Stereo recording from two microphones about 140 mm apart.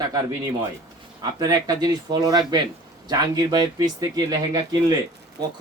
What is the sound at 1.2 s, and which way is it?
Speech, 25° right (ahead or behind).